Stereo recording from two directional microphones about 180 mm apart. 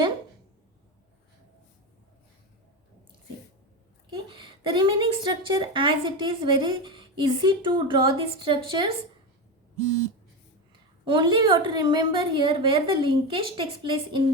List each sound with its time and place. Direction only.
4.4 s a woman's voice: 25° right (ahead or behind)
11.0 s a woman's voice: 30° right (ahead or behind)